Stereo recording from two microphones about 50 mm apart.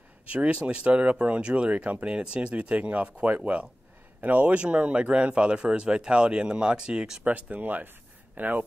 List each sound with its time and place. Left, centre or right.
0.3 s speech: right
7.2 s speech: right